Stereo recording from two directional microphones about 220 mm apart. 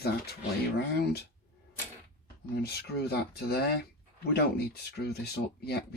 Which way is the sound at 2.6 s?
45° left (ahead or behind).